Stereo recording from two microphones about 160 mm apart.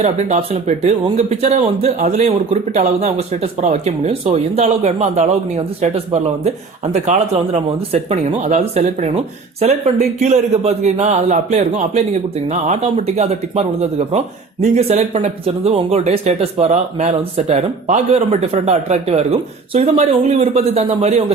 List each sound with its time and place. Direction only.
0.0 s speech: 40° right (ahead or behind)